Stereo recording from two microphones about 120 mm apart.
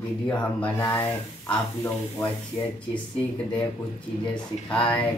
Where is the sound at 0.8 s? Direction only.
20° left (ahead or behind).